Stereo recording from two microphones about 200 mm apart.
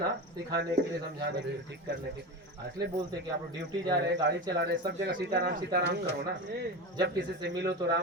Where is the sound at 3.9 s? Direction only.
55° right (ahead or behind).